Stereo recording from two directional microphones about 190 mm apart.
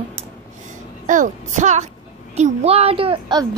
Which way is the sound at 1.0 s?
45° right (ahead or behind).